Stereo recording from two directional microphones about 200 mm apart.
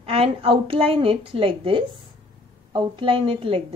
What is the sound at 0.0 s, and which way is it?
A woman's voice, 30° right (ahead or behind).